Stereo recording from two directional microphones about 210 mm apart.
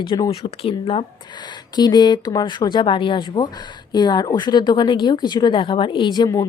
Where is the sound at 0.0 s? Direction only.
25° left (ahead or behind).